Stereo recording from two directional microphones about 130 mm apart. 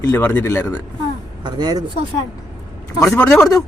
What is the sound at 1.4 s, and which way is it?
Speech, 30° right (ahead or behind).